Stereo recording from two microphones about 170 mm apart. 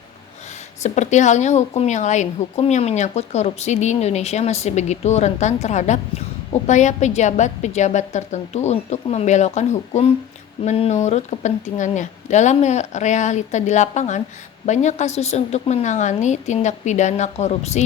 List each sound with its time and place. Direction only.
0.8 s a woman's voice: 45° left (ahead or behind)